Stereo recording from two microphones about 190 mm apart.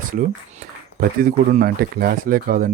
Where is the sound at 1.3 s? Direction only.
45° right (ahead or behind).